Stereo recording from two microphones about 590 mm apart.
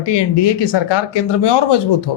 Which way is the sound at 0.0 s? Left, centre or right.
Left.